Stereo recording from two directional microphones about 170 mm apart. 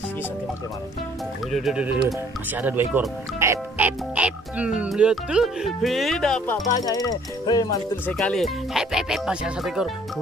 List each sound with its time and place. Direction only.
1.5 s speech: centre (ahead or behind)
6.8 s speech: 20° left (ahead or behind)
8.1 s speech: 5° left (ahead or behind)